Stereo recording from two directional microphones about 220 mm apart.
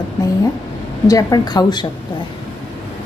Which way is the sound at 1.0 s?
15° left (ahead or behind).